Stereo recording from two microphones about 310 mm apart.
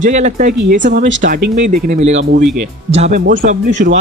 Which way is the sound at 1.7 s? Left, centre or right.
Right.